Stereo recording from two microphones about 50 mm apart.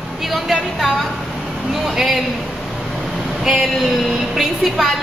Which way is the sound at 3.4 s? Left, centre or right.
Centre.